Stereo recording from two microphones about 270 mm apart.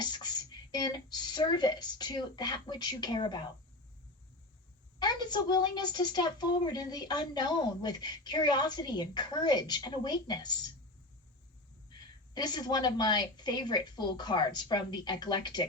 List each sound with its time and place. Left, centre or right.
0.0 s speech: centre
4.9 s a woman's voice: centre
12.3 s a woman's voice: centre